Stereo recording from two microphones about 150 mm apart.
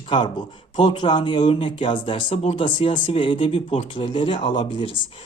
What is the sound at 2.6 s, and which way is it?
Speech, 35° left (ahead or behind).